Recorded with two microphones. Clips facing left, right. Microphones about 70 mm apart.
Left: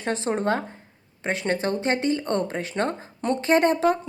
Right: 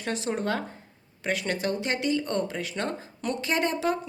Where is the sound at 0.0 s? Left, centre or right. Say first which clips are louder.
Left 4 dB; left.